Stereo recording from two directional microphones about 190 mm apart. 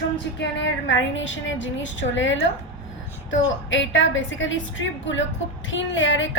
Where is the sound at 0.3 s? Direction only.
75° left (ahead or behind).